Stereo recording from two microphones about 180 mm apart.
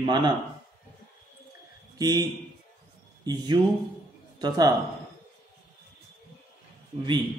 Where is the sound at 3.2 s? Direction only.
25° right (ahead or behind).